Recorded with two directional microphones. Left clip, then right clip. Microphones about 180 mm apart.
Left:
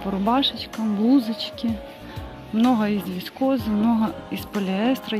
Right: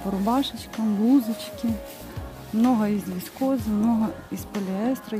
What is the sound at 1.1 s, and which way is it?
Speech, 15° right (ahead or behind).